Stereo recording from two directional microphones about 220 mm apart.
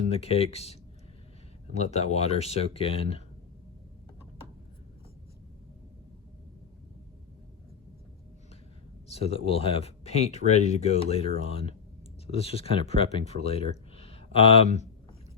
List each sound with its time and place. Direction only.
0.1 s speech: 25° left (ahead or behind)
9.0 s speech: 25° left (ahead or behind)
12.3 s speech: 25° left (ahead or behind)
14.0 s a sound: 25° left (ahead or behind)